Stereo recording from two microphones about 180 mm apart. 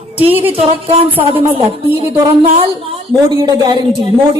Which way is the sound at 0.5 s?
35° right (ahead or behind).